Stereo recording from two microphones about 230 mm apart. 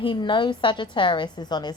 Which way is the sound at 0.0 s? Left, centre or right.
Left.